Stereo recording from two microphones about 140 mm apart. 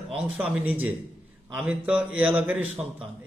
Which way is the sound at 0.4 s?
10° right (ahead or behind).